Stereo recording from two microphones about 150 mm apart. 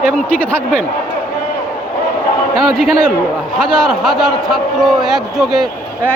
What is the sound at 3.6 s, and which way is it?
A man's voice, 5° left (ahead or behind).